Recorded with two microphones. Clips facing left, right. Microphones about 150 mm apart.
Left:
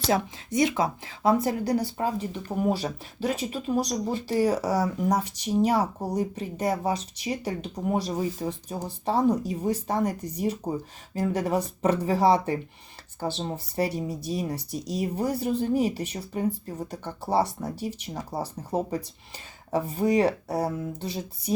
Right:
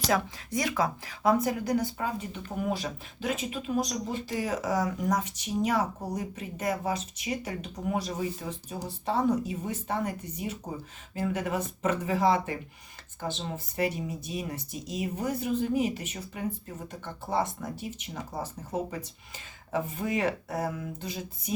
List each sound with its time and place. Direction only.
0.1 s speech: 25° left (ahead or behind)
9.6 s speech: 40° left (ahead or behind)